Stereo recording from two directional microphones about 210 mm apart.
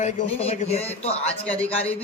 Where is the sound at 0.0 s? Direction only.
30° left (ahead or behind).